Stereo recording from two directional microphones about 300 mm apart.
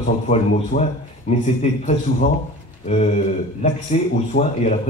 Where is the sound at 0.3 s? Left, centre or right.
Left.